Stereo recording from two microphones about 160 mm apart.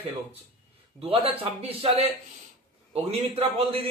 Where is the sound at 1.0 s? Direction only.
35° right (ahead or behind).